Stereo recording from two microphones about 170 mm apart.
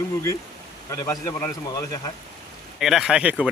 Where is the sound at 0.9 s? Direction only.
20° left (ahead or behind).